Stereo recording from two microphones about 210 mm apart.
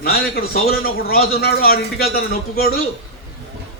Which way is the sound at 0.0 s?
45° left (ahead or behind).